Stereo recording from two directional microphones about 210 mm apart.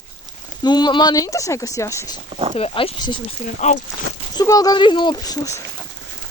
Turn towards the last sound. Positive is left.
turn(degrees=15)  # may be behind; listen again after turning